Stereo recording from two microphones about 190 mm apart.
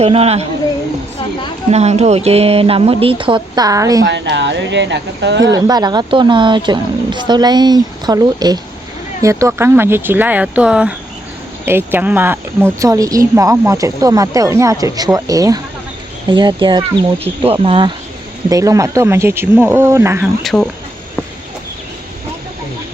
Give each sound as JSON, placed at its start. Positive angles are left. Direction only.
{"t": 0.0, "sound": "speech", "side_deg": -30}
{"t": 1.7, "sound": "speech", "side_deg": -35}
{"t": 4.0, "sound": "speech", "side_deg": -65}
{"t": 5.5, "sound": "speech", "side_deg": -20}
{"t": 20.4, "sound": "speech", "side_deg": 0}